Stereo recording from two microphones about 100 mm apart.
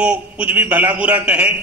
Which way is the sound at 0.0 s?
15° right (ahead or behind).